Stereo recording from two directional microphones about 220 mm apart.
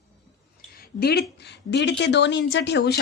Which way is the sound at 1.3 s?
50° left (ahead or behind).